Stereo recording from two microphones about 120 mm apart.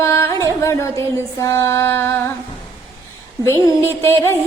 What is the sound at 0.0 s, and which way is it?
Carnatic music, 20° left (ahead or behind).